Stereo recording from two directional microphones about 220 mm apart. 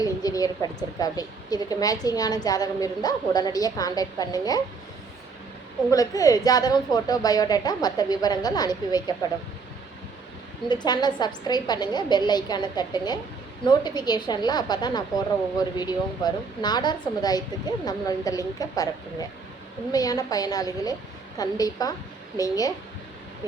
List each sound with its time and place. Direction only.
0.0 s a sound: 15° left (ahead or behind)
0.9 s a woman's voice: 15° left (ahead or behind)
5.9 s a woman's voice: 15° left (ahead or behind)
10.7 s a woman's voice: 20° left (ahead or behind)
19.9 s a woman's voice: 15° left (ahead or behind)